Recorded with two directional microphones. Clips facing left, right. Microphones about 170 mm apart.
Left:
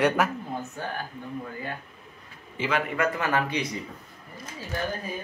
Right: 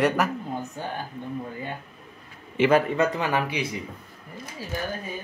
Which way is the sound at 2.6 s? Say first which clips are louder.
Right 9 dB; 80° right.